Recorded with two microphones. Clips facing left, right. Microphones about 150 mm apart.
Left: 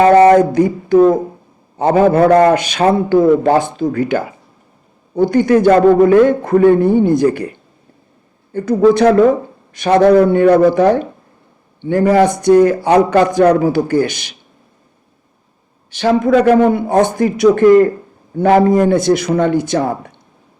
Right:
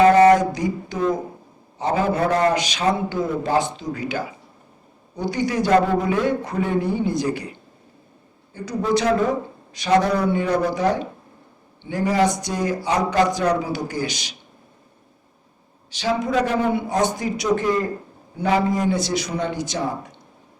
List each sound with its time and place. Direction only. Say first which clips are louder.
0.3 s a man's voice: left 10 dB; 55° left (ahead or behind)
8.5 s a man's voice: left 11 dB; 55° left (ahead or behind)
15.9 s speech: left 10 dB; 55° left (ahead or behind)